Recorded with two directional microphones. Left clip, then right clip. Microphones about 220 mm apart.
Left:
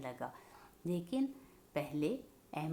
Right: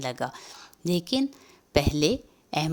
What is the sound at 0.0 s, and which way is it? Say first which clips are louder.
Speech: right 13 dB; 45° right (ahead or behind).